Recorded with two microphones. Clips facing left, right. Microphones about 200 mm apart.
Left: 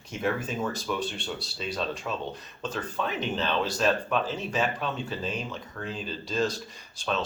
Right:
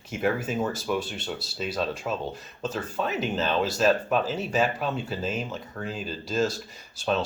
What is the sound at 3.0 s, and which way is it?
Speech, 40° right (ahead or behind).